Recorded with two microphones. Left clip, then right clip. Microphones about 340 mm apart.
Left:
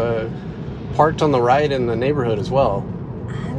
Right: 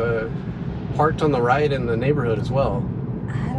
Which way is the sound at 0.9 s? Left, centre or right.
Left.